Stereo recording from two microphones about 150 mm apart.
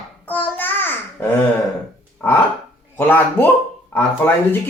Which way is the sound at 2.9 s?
15° left (ahead or behind).